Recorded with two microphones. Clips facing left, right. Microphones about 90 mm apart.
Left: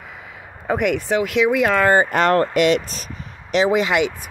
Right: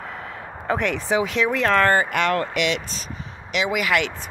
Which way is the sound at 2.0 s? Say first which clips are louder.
Left 5 dB; 40° left (ahead or behind).